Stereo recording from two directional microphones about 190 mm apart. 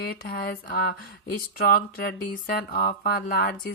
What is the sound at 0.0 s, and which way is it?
Speech, 55° left (ahead or behind).